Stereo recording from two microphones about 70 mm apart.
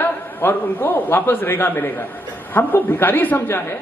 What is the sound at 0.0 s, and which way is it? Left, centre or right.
A man's voice, left.